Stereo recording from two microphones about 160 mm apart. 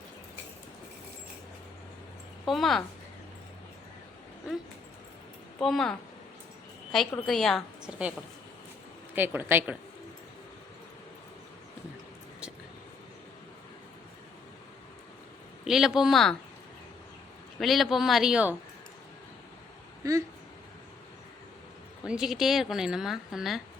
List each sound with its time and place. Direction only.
2.4 s speech: centre (ahead or behind)
4.5 s speech: 5° right (ahead or behind)
7.3 s speech: centre (ahead or behind)
9.1 s speech: 10° right (ahead or behind)
15.6 s speech: 5° right (ahead or behind)
17.6 s speech: centre (ahead or behind)
20.0 s speech: 20° right (ahead or behind)
22.0 s speech: 5° right (ahead or behind)